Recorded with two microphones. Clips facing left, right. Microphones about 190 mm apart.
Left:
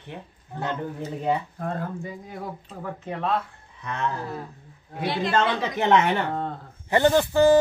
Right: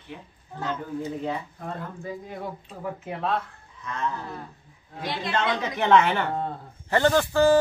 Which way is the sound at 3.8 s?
65° left (ahead or behind).